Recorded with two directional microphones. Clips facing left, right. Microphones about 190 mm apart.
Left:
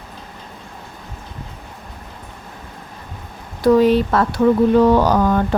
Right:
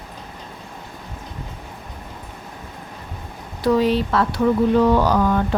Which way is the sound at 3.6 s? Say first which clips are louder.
Left 5 dB; 45° left (ahead or behind).